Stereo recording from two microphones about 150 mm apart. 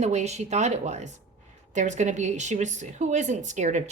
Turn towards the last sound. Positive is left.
turn(degrees=-50)  # may be behind; listen again after turning